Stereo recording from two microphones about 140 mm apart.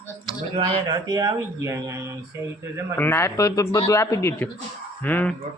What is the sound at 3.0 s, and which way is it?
Speech, 15° left (ahead or behind).